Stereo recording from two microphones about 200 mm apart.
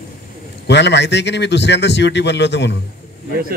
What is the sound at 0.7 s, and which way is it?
A man's voice, 60° left (ahead or behind).